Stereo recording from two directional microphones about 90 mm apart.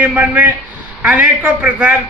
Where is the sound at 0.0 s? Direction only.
15° right (ahead or behind).